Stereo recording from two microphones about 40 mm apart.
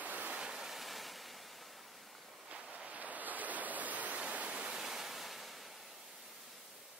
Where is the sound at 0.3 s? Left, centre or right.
Centre.